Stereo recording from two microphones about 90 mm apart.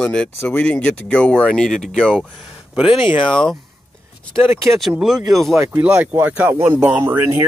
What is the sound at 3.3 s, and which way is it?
Speech, 5° left (ahead or behind).